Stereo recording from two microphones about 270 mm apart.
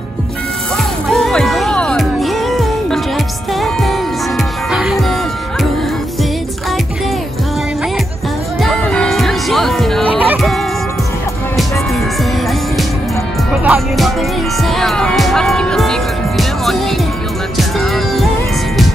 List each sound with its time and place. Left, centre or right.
1.1 s music: centre
8.6 s music: centre
13.7 s speech: centre
14.6 s music: centre